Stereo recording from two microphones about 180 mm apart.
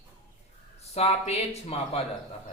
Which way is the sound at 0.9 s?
35° left (ahead or behind).